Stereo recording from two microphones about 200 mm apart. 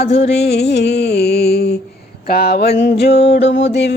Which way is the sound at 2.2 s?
50° left (ahead or behind).